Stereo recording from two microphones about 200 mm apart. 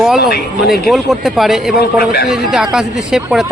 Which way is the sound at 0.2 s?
50° left (ahead or behind).